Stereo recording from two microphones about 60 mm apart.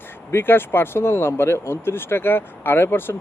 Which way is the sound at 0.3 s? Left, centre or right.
Left.